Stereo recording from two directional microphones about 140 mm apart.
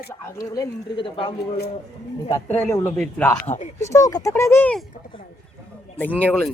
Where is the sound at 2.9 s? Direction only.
5° left (ahead or behind).